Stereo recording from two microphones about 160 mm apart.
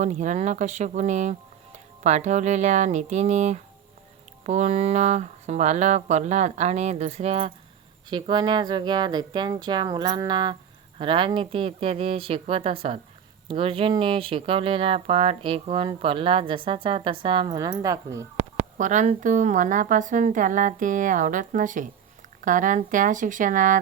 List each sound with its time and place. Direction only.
0.0 s speech: 50° right (ahead or behind)
8.1 s speech: 25° right (ahead or behind)
18.3 s speech: 50° right (ahead or behind)